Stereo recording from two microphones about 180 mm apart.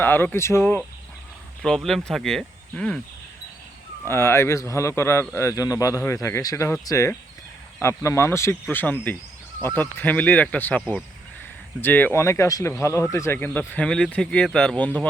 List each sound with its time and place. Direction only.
0.0 s speech: 10° left (ahead or behind)
1.6 s speech: 5° left (ahead or behind)
4.0 s speech: 15° left (ahead or behind)